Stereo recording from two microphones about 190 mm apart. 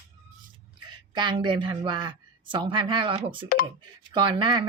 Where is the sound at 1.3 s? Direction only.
25° right (ahead or behind).